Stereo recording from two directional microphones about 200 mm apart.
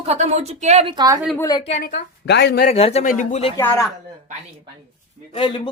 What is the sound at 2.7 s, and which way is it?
Speech, 30° left (ahead or behind).